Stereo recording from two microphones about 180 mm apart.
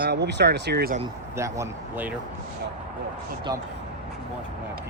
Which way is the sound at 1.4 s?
10° right (ahead or behind).